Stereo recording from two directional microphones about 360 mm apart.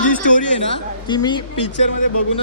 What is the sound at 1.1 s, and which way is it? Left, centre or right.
Speech, centre.